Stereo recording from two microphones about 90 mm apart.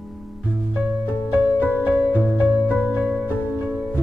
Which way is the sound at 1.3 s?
20° right (ahead or behind).